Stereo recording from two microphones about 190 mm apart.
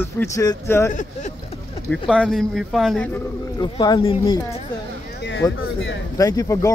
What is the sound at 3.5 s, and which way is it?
Speech, 20° left (ahead or behind).